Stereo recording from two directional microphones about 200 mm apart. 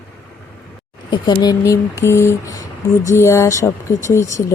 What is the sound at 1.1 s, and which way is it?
Speech, 20° left (ahead or behind).